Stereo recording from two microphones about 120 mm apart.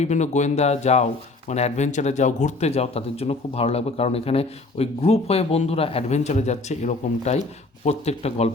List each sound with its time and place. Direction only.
0.0 s speech: 75° left (ahead or behind)
7.9 s speech: 60° left (ahead or behind)